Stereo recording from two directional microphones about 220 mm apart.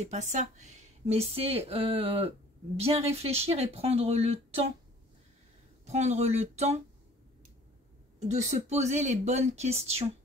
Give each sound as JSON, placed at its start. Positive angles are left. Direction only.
{"t": 0.0, "sound": "speech", "side_deg": -30}
{"t": 5.9, "sound": "speech", "side_deg": -30}
{"t": 8.2, "sound": "speech", "side_deg": -30}